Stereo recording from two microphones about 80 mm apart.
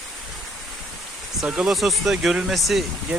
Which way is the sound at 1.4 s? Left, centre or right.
Centre.